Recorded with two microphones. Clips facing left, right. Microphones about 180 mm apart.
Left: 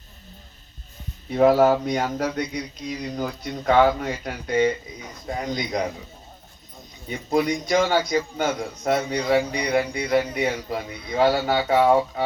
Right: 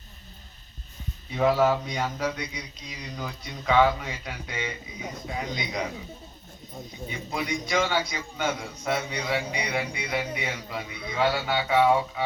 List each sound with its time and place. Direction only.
1.3 s a man's voice: 50° left (ahead or behind)
7.1 s a man's voice: 45° left (ahead or behind)